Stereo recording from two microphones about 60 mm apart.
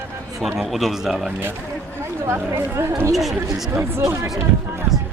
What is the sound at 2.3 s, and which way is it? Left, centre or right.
Speech, right.